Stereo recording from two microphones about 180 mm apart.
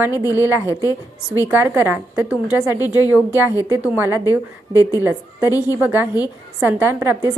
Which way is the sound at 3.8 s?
15° right (ahead or behind).